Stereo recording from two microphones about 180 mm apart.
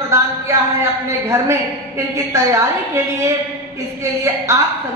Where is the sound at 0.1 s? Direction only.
15° right (ahead or behind).